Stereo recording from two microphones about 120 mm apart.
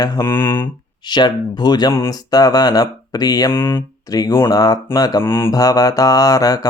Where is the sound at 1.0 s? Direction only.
40° left (ahead or behind).